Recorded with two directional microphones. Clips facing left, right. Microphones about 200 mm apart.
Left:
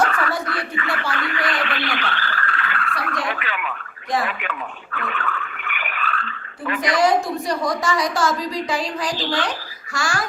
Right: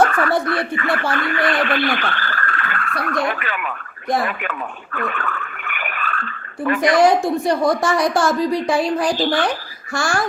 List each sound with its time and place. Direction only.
0.0 s speech: 50° right (ahead or behind)